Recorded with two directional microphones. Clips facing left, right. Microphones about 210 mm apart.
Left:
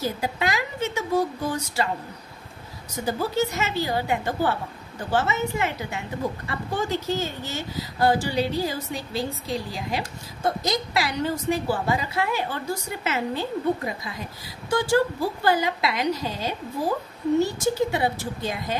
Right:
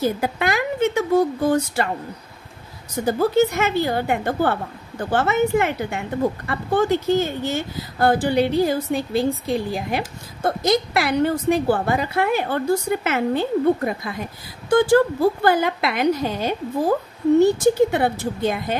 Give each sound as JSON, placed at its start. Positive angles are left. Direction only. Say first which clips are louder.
{"t": 0.0, "sound": "a woman's voice", "louder": "right 5 dB", "side_deg": -55}
{"t": 3.1, "sound": "a woman's voice", "louder": "right 7 dB", "side_deg": -55}